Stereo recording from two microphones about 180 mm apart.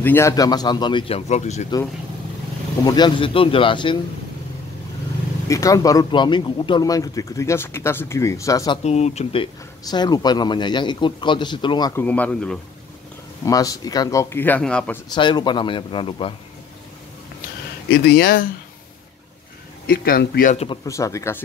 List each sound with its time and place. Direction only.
0.0 s speech: 15° left (ahead or behind); by 1.7 s 40° left (ahead or behind)
2.8 s speech: 25° left (ahead or behind)
5.5 s speech: 20° left (ahead or behind)
8.8 s speech: 40° left (ahead or behind)
11.9 s speech: 10° left (ahead or behind)
13.5 s speech: 20° left (ahead or behind)
15.0 s speech: 25° left (ahead or behind)
17.8 s speech: 60° left (ahead or behind)
19.9 s speech: 55° left (ahead or behind)
20.5 s speech: 30° left (ahead or behind)
20.8 s speech: 15° left (ahead or behind)